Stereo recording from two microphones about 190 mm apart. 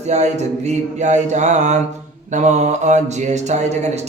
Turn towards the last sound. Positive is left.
turn(degrees=-35)  # may be behind; listen again after turning